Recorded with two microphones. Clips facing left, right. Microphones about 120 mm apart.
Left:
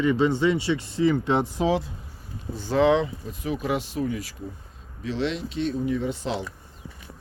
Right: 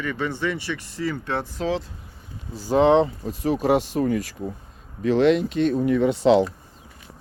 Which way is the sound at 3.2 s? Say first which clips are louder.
Right 7 dB; 40° right (ahead or behind).